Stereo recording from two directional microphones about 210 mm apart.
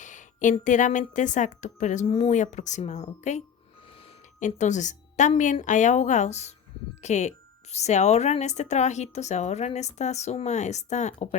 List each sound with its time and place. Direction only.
0.0 s a woman's voice: 35° left (ahead or behind)